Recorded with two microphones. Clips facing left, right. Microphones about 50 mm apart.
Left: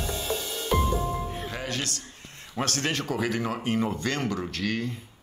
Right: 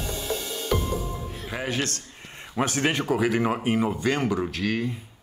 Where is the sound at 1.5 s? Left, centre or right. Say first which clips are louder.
Right 3 dB; centre.